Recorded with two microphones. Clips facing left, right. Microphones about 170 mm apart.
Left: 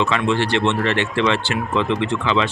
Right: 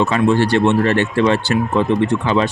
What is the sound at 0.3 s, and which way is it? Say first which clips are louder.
Speech: right 7 dB; 40° right (ahead or behind).